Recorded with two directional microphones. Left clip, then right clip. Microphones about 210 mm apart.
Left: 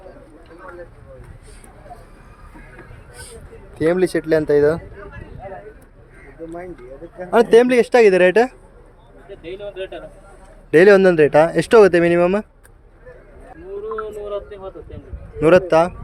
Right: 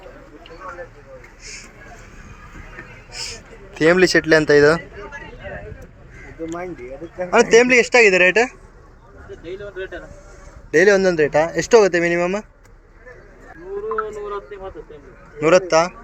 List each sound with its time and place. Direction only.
3.8 s speech: 5° left (ahead or behind)
7.3 s a man's voice: 25° left (ahead or behind)
10.7 s speech: 35° left (ahead or behind)
15.4 s speech: 35° left (ahead or behind)